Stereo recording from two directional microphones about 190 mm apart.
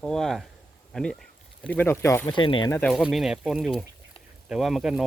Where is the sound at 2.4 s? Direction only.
25° left (ahead or behind).